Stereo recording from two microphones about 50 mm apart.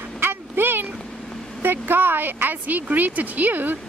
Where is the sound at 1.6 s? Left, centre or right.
Right.